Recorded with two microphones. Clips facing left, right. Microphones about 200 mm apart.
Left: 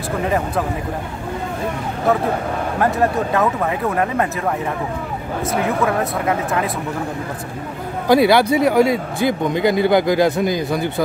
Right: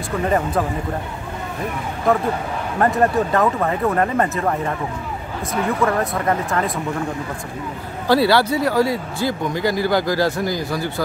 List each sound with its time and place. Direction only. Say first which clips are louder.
2.8 s speech: right 2 dB; centre (ahead or behind)
5.9 s speech: even; 5° left (ahead or behind)
8.1 s speech: left 3 dB; 15° left (ahead or behind)